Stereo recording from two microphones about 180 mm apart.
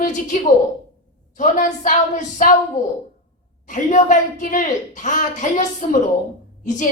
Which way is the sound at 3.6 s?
45° left (ahead or behind).